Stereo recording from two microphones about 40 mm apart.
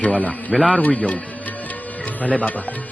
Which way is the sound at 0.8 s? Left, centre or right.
Left.